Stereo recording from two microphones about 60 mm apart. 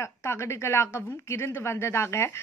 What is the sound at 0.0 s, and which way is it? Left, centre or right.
A woman's voice, left.